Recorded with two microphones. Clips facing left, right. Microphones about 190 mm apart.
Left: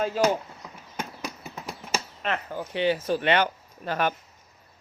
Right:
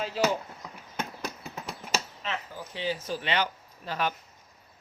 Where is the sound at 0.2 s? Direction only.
45° left (ahead or behind).